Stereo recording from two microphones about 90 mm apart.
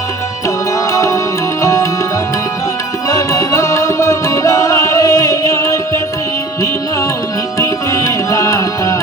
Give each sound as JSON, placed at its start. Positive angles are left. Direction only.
{"t": 0.9, "sound": "music", "side_deg": 35}
{"t": 3.1, "sound": "music", "side_deg": 35}
{"t": 7.6, "sound": "music", "side_deg": 35}